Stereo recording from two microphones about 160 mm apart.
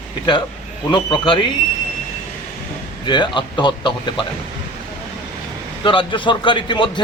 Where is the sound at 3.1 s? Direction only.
30° left (ahead or behind).